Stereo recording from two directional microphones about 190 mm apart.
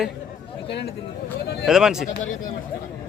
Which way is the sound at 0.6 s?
65° left (ahead or behind).